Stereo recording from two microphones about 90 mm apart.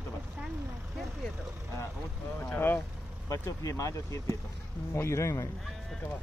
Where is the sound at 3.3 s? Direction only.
40° left (ahead or behind).